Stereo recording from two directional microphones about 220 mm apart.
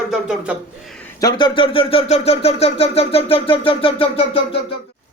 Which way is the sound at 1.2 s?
20° left (ahead or behind).